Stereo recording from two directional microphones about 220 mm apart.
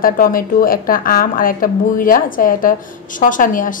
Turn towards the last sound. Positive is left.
turn(degrees=35)  # may be behind; listen again after turning